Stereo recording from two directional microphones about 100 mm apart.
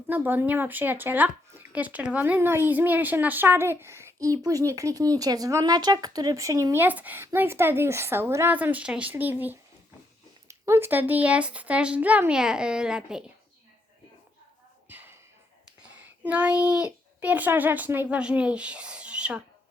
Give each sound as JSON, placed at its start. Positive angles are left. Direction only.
{"t": 0.1, "sound": "speech", "side_deg": -20}
{"t": 6.8, "sound": "speech", "side_deg": -15}
{"t": 14.8, "sound": "a sound", "side_deg": -20}
{"t": 16.2, "sound": "speech", "side_deg": -15}